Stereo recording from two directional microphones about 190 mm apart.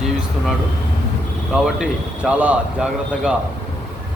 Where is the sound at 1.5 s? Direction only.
5° right (ahead or behind).